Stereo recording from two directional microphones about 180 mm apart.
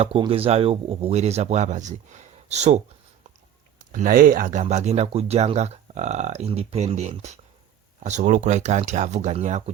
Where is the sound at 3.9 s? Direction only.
50° right (ahead or behind).